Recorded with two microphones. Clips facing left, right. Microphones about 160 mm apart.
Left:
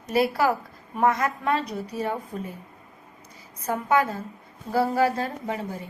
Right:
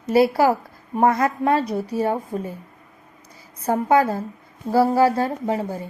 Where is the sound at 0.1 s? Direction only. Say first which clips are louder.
Right 6 dB; 30° right (ahead or behind).